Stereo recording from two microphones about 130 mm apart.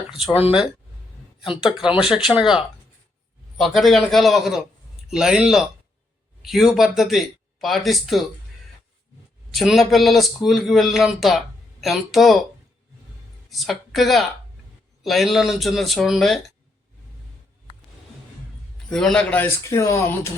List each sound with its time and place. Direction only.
1.6 s a man's voice: 5° right (ahead or behind)
3.6 s a man's voice: centre (ahead or behind)
9.5 s a man's voice: centre (ahead or behind)
13.5 s a man's voice: centre (ahead or behind)
18.9 s a man's voice: 5° left (ahead or behind)
19.6 s speech: 20° left (ahead or behind)